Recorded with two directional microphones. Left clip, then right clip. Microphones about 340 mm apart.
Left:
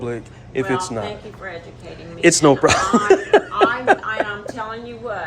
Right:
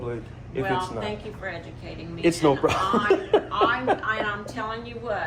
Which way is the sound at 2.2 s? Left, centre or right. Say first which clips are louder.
Left 8 dB; left.